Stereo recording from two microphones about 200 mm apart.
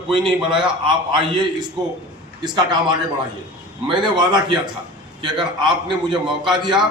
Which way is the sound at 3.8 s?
20° right (ahead or behind).